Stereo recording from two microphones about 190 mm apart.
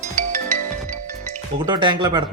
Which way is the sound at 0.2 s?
40° right (ahead or behind).